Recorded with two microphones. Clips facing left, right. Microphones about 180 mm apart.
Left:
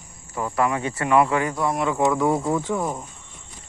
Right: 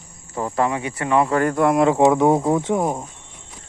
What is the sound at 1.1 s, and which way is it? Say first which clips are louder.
Speech: even; 25° right (ahead or behind).